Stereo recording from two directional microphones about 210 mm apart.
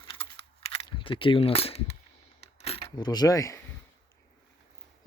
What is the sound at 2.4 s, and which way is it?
Coin, 30° left (ahead or behind).